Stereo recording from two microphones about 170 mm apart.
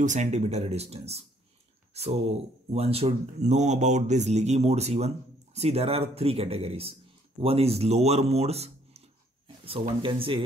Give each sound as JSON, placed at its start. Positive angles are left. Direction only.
{"t": 0.0, "sound": "speech", "side_deg": -45}